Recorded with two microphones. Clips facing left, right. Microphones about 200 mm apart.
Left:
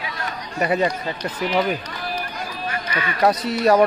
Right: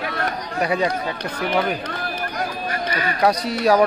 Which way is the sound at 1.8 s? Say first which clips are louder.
Right 2 dB; 55° right (ahead or behind).